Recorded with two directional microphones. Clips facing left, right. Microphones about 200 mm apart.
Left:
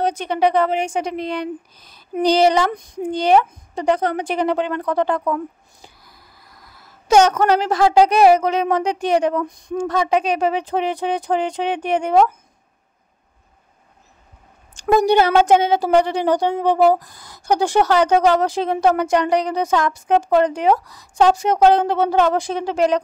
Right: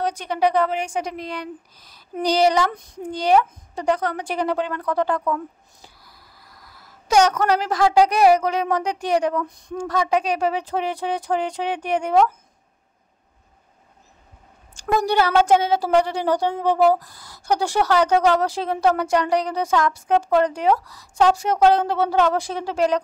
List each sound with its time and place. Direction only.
0.0 s a woman's voice: 25° left (ahead or behind)
14.7 s a woman's voice: 20° left (ahead or behind)